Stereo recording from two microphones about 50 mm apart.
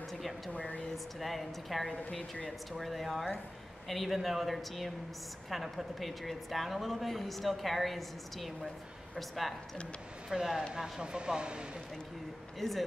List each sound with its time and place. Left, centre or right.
0.9 s a woman's voice: centre
12.5 s speech: centre